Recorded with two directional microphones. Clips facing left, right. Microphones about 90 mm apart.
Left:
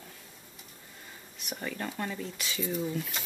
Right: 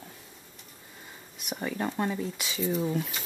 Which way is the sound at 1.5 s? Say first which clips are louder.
Right 5 dB; 15° right (ahead or behind).